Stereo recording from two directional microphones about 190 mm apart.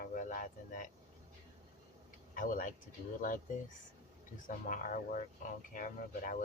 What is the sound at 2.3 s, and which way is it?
Speech, 45° left (ahead or behind).